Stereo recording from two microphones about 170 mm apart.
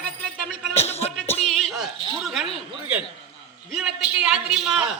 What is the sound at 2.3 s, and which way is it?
A man's voice, centre (ahead or behind).